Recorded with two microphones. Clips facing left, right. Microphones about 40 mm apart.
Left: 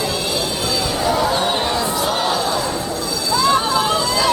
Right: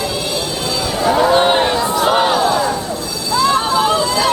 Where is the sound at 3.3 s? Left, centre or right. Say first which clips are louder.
Right 2 dB; centre.